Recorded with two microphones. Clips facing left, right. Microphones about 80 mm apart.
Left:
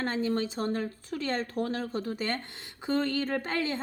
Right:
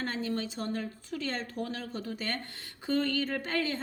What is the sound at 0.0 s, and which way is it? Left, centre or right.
A woman's voice, left.